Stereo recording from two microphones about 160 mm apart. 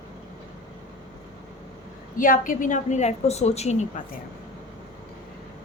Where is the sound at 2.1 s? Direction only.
60° left (ahead or behind).